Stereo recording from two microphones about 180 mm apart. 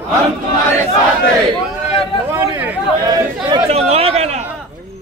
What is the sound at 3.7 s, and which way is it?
Speech, 35° right (ahead or behind).